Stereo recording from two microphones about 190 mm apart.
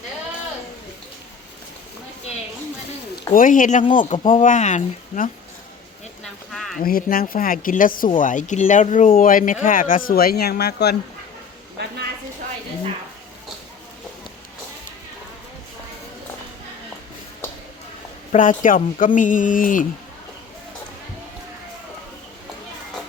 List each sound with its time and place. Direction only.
3.3 s speech: 45° left (ahead or behind)
6.2 s a sound: centre (ahead or behind)
6.8 s speech: 50° left (ahead or behind)
18.3 s speech: 45° left (ahead or behind)